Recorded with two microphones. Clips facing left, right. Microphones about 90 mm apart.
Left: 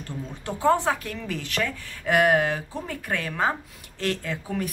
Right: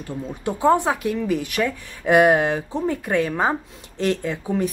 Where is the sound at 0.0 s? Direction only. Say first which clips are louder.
Right 7 dB; 15° right (ahead or behind).